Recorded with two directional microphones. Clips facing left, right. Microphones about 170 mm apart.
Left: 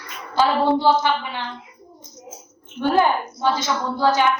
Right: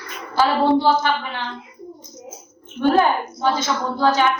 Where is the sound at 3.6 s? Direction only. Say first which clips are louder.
Right 1 dB; 15° left (ahead or behind).